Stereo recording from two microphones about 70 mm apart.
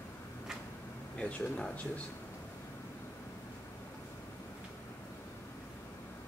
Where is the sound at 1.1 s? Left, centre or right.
Centre.